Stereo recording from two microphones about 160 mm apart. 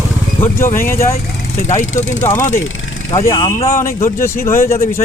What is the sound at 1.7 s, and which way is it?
Speech, 45° left (ahead or behind).